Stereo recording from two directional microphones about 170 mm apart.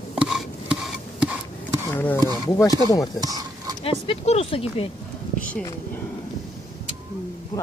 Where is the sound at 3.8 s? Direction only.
35° left (ahead or behind).